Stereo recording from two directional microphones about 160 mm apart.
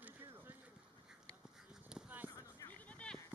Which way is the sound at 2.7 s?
10° left (ahead or behind).